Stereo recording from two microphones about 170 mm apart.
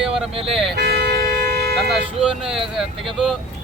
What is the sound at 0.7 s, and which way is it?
Vehicle, 75° right (ahead or behind).